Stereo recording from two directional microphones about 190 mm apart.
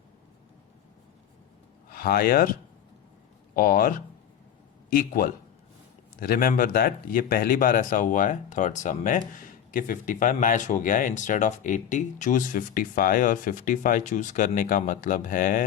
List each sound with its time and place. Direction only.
1.9 s speech: 50° left (ahead or behind)
3.5 s speech: 50° left (ahead or behind)